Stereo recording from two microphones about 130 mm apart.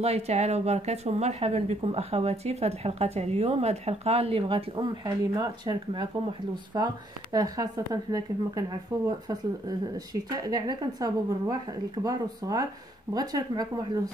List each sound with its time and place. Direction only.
0.0 s a woman's voice: 55° right (ahead or behind); by 8.6 s 25° right (ahead or behind)
10.3 s a woman's voice: 30° right (ahead or behind)